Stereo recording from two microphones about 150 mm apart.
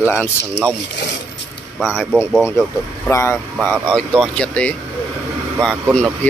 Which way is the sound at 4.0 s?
5° left (ahead or behind).